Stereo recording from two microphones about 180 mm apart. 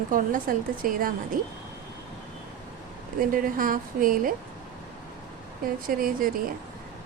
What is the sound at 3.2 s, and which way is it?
Speech, 50° right (ahead or behind).